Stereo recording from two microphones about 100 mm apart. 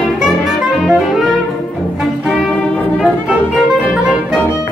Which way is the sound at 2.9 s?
5° right (ahead or behind).